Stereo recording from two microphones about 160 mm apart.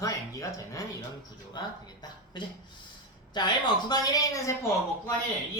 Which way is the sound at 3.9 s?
25° left (ahead or behind).